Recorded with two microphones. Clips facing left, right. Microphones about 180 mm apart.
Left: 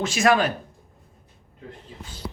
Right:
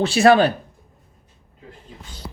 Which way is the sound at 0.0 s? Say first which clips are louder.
Right 6 dB; 30° right (ahead or behind).